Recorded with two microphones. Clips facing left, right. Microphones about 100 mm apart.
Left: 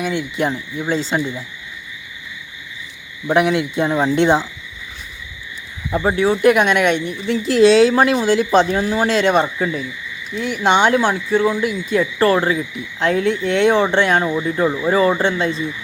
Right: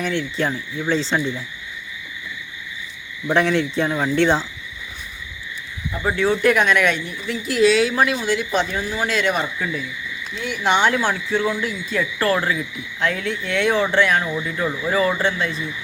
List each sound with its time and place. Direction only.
0.0 s speech: 15° left (ahead or behind)
3.2 s speech: 15° left (ahead or behind)
6.1 s a woman's voice: 15° left (ahead or behind); by 9.8 s 35° left (ahead or behind)
10.6 s frog: 20° left (ahead or behind)